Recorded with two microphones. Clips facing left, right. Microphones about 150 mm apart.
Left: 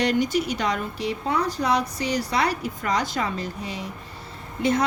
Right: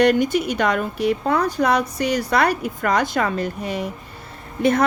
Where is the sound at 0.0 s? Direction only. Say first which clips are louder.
Right 5 dB; 55° right (ahead or behind).